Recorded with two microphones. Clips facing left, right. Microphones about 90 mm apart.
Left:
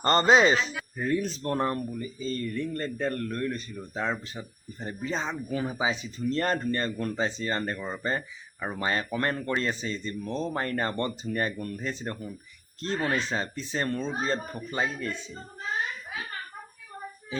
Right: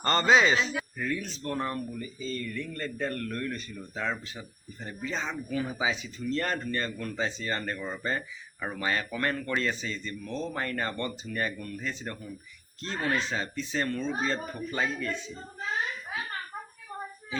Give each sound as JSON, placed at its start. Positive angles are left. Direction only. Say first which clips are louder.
{"t": 0.0, "sound": "speech", "louder": "left 2 dB", "side_deg": 35}